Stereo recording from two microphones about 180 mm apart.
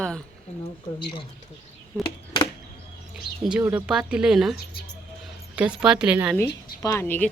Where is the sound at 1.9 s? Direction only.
10° right (ahead or behind).